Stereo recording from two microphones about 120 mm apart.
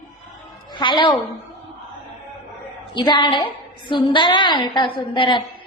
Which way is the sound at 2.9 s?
40° left (ahead or behind).